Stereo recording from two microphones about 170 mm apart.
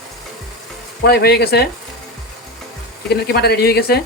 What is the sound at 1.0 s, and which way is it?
Speech, 70° left (ahead or behind).